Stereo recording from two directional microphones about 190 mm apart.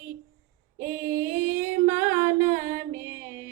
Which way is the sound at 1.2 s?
45° right (ahead or behind).